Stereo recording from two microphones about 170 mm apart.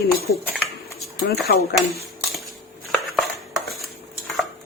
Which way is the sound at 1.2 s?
70° left (ahead or behind).